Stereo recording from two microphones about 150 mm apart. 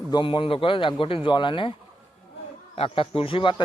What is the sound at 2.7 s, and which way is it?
Speech, 40° left (ahead or behind).